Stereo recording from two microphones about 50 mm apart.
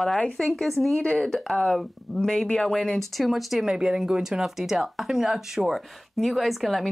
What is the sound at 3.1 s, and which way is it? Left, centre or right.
Speech, centre.